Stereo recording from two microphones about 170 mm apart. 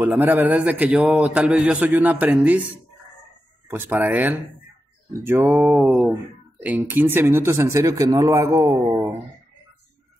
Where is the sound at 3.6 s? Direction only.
15° right (ahead or behind).